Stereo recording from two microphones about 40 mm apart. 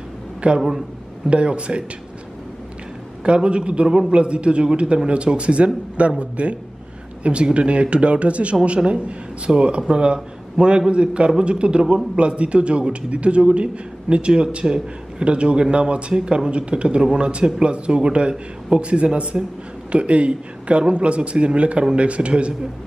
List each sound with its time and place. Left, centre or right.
0.6 s a man's voice: centre
1.3 s a man's voice: right
3.3 s a man's voice: right